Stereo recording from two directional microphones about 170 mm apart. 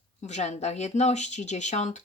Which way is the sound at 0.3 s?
40° left (ahead or behind).